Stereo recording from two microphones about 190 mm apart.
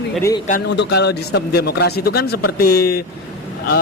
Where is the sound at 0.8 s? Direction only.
65° left (ahead or behind).